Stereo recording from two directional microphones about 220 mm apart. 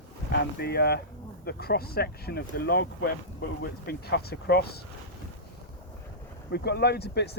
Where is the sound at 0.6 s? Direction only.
45° left (ahead or behind).